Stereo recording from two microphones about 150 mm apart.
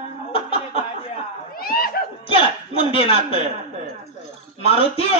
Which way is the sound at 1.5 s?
90° left.